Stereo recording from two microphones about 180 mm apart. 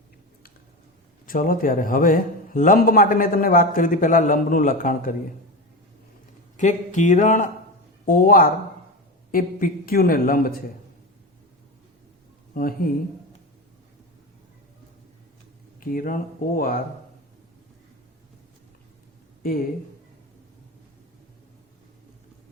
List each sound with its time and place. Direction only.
1.3 s a man's voice: 50° left (ahead or behind)
6.6 s a man's voice: 40° left (ahead or behind)
12.5 s a man's voice: 55° left (ahead or behind)
15.8 s a man's voice: 50° left (ahead or behind)
19.4 s speech: 50° left (ahead or behind)